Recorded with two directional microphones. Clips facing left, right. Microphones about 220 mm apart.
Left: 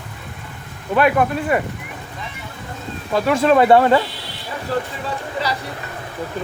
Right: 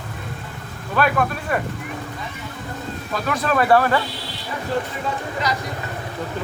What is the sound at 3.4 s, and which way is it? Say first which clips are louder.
Speech: left 4 dB; 25° left (ahead or behind).